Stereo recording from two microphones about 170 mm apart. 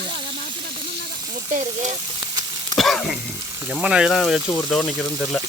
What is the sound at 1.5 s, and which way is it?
Speech, 45° right (ahead or behind).